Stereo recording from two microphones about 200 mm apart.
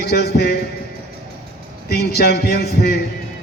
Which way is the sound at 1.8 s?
50° left (ahead or behind).